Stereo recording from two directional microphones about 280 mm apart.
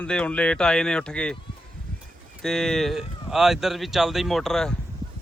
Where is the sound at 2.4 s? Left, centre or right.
Centre.